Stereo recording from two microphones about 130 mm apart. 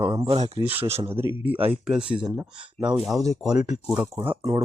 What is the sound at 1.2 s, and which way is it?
Speech, 15° right (ahead or behind).